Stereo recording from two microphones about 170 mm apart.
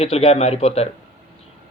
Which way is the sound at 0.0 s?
35° left (ahead or behind).